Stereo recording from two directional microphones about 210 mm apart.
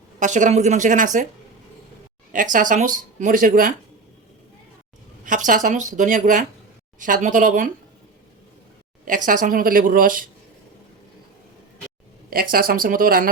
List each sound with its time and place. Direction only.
0.2 s speech: 35° right (ahead or behind)
2.3 s speech: 40° right (ahead or behind)
5.2 s speech: 40° right (ahead or behind)
9.0 s speech: 40° right (ahead or behind)
12.3 s speech: 45° right (ahead or behind)